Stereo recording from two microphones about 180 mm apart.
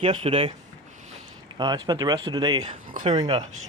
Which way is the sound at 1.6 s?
25° right (ahead or behind).